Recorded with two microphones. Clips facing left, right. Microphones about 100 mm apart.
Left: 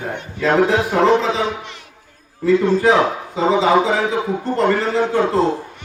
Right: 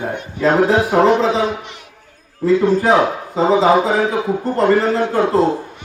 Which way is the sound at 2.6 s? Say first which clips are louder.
Right 2 dB; 5° right (ahead or behind).